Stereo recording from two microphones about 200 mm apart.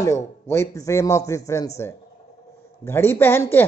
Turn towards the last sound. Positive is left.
turn(degrees=10)  # may be behind; listen again after turning